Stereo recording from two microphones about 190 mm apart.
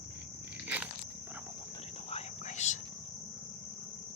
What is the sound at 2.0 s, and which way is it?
Whispering, 35° left (ahead or behind).